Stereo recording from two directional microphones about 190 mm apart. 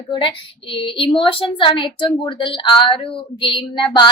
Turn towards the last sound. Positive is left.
turn(degrees=25)  # may be behind; listen again after turning